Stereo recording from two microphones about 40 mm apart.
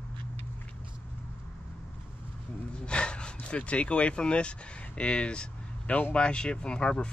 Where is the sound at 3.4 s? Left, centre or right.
Left.